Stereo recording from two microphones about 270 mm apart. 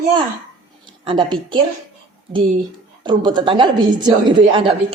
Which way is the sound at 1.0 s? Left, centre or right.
Centre.